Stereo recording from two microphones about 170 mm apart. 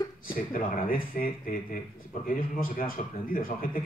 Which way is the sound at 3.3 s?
55° left (ahead or behind).